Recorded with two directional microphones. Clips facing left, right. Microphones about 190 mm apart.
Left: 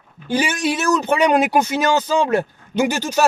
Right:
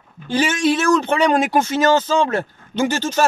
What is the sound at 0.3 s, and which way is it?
Speech, 10° left (ahead or behind).